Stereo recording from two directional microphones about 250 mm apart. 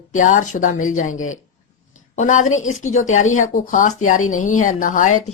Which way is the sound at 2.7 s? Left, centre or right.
Left.